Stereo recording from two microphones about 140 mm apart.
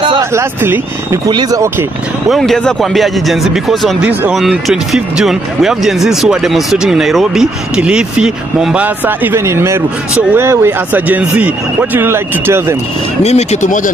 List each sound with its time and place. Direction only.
0.2 s speech: 20° right (ahead or behind)
2.2 s speech: centre (ahead or behind)
4.4 s speech: centre (ahead or behind); by 12.7 s 20° right (ahead or behind)
13.2 s speech: 50° left (ahead or behind)